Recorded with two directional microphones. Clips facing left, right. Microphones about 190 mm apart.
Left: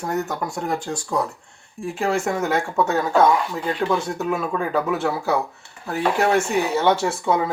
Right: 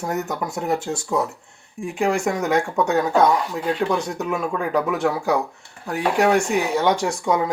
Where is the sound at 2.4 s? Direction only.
Centre (ahead or behind).